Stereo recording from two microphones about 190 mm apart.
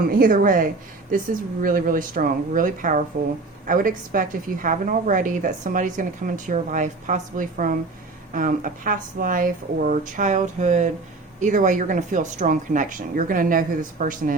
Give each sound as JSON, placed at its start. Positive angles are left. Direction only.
{"t": 0.1, "sound": "a woman's voice", "side_deg": -50}